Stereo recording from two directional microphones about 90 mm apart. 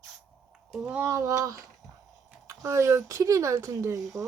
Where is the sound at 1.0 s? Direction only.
35° right (ahead or behind).